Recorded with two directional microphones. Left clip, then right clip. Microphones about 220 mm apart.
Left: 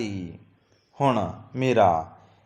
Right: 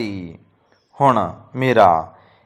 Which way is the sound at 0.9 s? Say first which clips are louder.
Right 8 dB; 10° right (ahead or behind).